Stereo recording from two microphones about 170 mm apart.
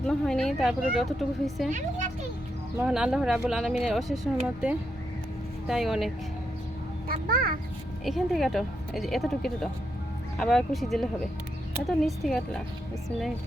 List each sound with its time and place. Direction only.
0.1 s speech: 5° left (ahead or behind)
2.8 s speech: 5° right (ahead or behind)
7.1 s a child's voice: 55° right (ahead or behind)
8.0 s speech: centre (ahead or behind)